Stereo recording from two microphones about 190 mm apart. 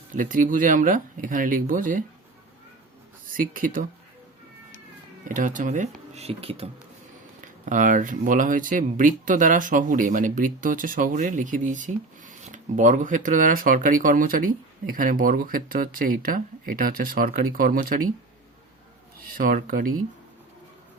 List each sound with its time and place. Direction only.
0.1 s speech: 45° right (ahead or behind)
3.2 s speech: 45° right (ahead or behind)
5.3 s speech: 45° right (ahead or behind)
7.4 s speech: 40° right (ahead or behind)
19.3 s speech: 45° right (ahead or behind)